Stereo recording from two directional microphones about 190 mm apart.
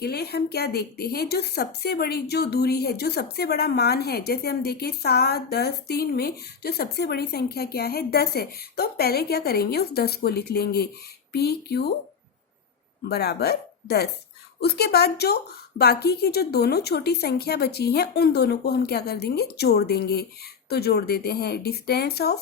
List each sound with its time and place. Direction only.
0.0 s a woman's voice: 55° left (ahead or behind)
13.1 s a woman's voice: 60° left (ahead or behind)